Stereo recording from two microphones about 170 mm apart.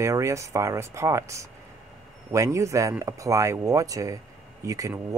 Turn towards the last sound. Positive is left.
turn(degrees=-20)  # may be behind; listen again after turning